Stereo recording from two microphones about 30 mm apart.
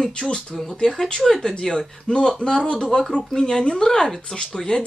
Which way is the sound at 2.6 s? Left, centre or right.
Left.